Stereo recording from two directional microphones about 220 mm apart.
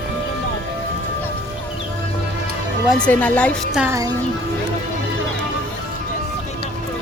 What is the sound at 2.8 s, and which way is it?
Speech, 5° left (ahead or behind).